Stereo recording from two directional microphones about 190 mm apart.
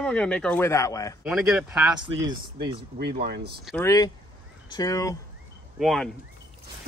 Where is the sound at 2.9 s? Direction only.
55° right (ahead or behind).